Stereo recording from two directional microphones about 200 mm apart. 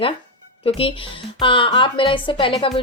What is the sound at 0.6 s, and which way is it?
A woman's voice, 25° left (ahead or behind).